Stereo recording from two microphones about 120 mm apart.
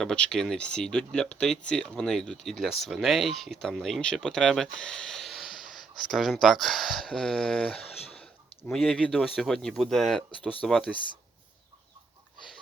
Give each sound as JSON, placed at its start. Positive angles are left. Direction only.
{"t": 0.0, "sound": "speech", "side_deg": 5}